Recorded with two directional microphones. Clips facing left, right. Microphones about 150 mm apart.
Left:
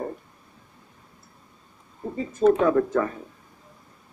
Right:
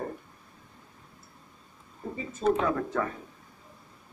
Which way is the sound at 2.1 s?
45° left (ahead or behind).